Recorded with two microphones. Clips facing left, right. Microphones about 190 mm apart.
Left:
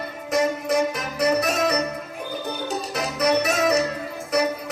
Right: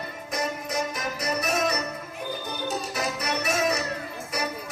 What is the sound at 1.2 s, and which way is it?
Music, 70° left (ahead or behind).